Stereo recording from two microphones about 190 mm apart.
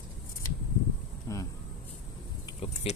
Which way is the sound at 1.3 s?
15° left (ahead or behind).